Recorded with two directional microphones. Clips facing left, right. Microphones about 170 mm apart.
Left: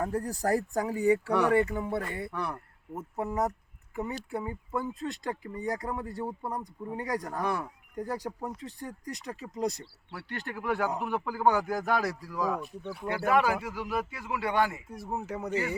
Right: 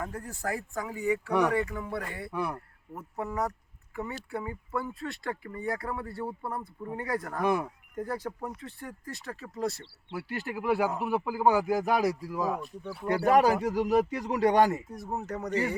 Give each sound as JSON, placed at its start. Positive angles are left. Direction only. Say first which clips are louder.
{"t": 0.0, "sound": "speech", "louder": "left 5 dB", "side_deg": 35}
{"t": 2.3, "sound": "a man's voice", "louder": "right 2 dB", "side_deg": -5}
{"t": 2.9, "sound": "speech", "louder": "left 2 dB", "side_deg": 20}
{"t": 7.4, "sound": "a man's voice", "louder": "right 7 dB", "side_deg": -15}
{"t": 7.9, "sound": "speech", "louder": "even", "side_deg": 15}
{"t": 10.3, "sound": "a man's voice", "louder": "right 3 dB", "side_deg": -5}
{"t": 11.9, "sound": "speech", "louder": "right 3 dB", "side_deg": -20}
{"t": 13.1, "sound": "a man's voice", "louder": "right 4 dB", "side_deg": -35}
{"t": 14.8, "sound": "a man's voice", "louder": "even", "side_deg": 0}